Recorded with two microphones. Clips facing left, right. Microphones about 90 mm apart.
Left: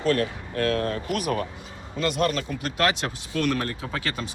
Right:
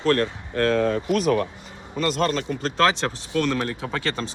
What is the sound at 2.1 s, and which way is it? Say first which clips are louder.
Speech: right 1 dB; 90° right.